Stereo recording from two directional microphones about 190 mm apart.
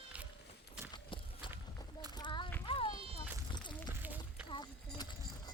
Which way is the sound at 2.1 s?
25° left (ahead or behind).